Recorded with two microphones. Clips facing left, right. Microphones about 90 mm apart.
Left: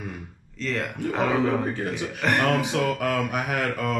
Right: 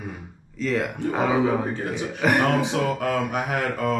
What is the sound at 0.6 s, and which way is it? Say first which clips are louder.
A man's voice: right 4 dB; 5° right (ahead or behind).